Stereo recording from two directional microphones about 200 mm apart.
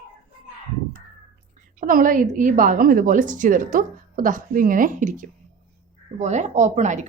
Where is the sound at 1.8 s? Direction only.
45° right (ahead or behind).